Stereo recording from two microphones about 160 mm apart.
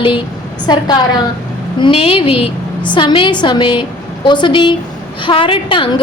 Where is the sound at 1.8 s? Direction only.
35° left (ahead or behind).